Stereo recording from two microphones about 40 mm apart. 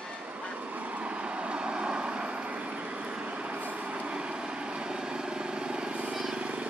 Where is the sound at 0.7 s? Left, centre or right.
Right.